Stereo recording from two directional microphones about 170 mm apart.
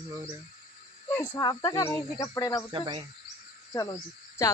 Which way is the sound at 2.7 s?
25° right (ahead or behind).